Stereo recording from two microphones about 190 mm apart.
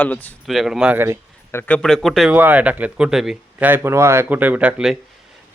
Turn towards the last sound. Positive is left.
turn(degrees=-5)  # may be behind; listen again after turning